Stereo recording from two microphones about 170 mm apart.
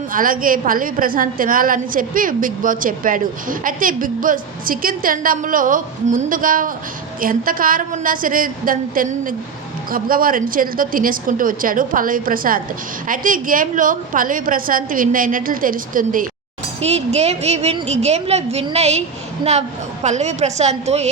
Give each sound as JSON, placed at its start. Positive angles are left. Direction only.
{"t": 0.1, "sound": "a woman's voice", "side_deg": -55}
{"t": 16.8, "sound": "a woman's voice", "side_deg": -40}